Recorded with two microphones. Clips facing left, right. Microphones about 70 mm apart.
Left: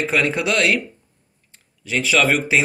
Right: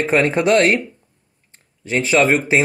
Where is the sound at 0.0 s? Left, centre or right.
Right.